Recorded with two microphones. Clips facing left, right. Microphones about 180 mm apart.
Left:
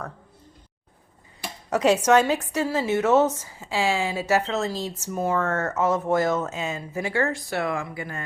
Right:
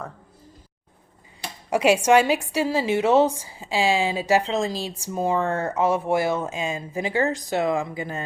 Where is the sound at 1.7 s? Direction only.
10° right (ahead or behind).